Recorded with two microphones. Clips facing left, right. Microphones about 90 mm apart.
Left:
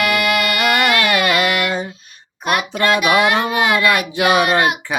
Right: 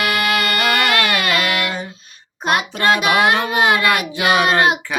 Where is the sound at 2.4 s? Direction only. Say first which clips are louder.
Even; 30° right (ahead or behind).